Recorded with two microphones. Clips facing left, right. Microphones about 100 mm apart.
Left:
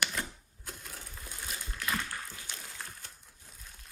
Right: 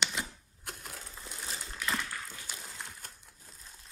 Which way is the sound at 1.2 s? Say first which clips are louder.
Even; 30° right (ahead or behind).